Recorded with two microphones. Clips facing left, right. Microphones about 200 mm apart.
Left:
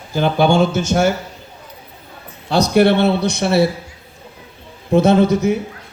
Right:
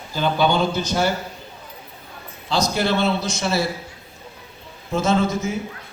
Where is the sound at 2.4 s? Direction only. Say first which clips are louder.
Left 8 dB; 60° left (ahead or behind).